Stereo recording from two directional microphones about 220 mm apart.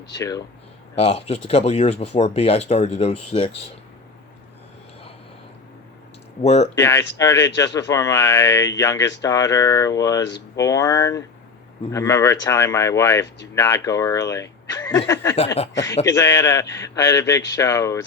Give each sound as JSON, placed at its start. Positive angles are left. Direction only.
{"t": 0.1, "sound": "speech", "side_deg": 15}
{"t": 0.9, "sound": "speech", "side_deg": 25}
{"t": 6.4, "sound": "speech", "side_deg": 30}
{"t": 6.7, "sound": "speech", "side_deg": 15}
{"t": 15.6, "sound": "speech", "side_deg": 30}
{"t": 16.0, "sound": "speech", "side_deg": 15}